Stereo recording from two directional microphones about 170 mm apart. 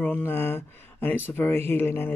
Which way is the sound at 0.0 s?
10° left (ahead or behind).